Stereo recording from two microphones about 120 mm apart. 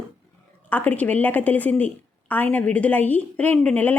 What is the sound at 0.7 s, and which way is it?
A woman's voice, 15° left (ahead or behind).